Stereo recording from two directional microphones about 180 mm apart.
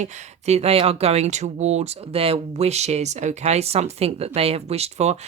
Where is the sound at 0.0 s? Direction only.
35° right (ahead or behind).